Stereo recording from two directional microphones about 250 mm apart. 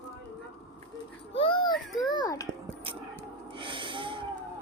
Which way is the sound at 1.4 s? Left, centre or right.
Centre.